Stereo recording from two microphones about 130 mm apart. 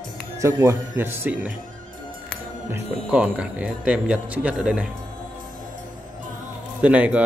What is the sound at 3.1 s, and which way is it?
Speech, 10° right (ahead or behind).